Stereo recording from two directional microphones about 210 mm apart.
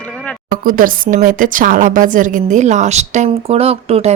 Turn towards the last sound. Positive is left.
turn(degrees=-30)  # may be behind; listen again after turning